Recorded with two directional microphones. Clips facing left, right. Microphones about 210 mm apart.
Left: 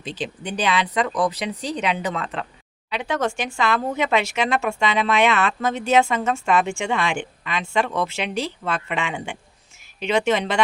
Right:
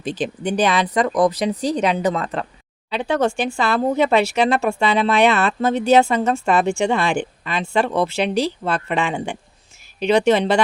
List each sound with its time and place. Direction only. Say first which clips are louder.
0.0 s speech: right 6 dB; 50° right (ahead or behind)
2.9 s speech: right 5 dB; 30° right (ahead or behind)